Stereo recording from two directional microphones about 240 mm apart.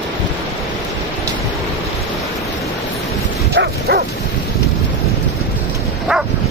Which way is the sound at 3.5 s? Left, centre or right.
Right.